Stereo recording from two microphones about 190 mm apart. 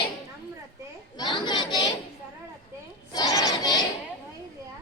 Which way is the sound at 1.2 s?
25° left (ahead or behind).